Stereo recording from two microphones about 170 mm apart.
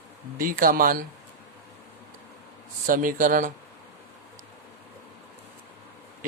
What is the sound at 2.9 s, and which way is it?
Speech, 55° right (ahead or behind).